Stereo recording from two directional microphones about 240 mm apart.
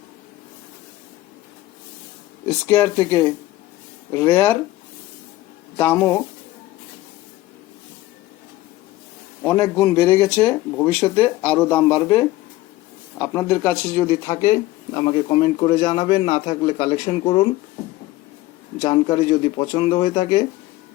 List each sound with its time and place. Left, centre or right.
2.5 s a man's voice: centre
5.7 s speech: centre
9.4 s a man's voice: centre
15.0 s a man's voice: left
18.8 s a man's voice: centre